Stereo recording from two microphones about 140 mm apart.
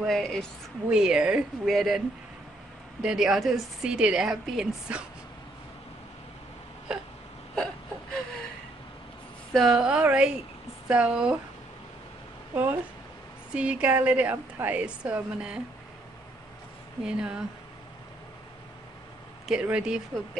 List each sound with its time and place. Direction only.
0.0 s a woman's voice: centre (ahead or behind)
7.5 s whimper: 5° left (ahead or behind)
9.5 s a woman's voice: centre (ahead or behind)
13.5 s a woman's voice: 10° right (ahead or behind)
17.0 s a woman's voice: 5° right (ahead or behind)
19.4 s a woman's voice: 5° right (ahead or behind)